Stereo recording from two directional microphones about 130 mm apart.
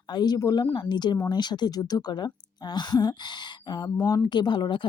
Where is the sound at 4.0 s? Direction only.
20° left (ahead or behind).